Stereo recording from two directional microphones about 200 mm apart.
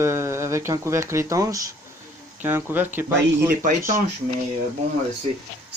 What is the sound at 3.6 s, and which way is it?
Speech, 40° right (ahead or behind).